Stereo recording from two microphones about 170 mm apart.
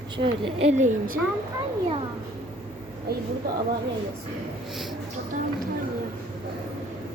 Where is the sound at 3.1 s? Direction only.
70° right (ahead or behind).